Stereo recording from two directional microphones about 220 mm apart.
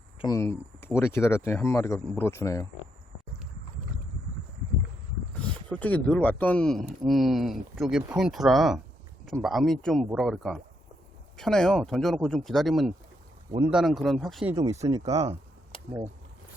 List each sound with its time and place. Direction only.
0.2 s speech: 15° left (ahead or behind)
5.3 s speech: 5° left (ahead or behind)
14.5 s speech: 15° right (ahead or behind)